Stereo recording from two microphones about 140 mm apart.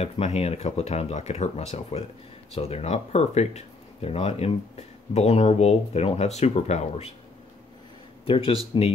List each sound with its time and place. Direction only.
0.0 s speech: 45° left (ahead or behind)
8.3 s speech: 40° left (ahead or behind)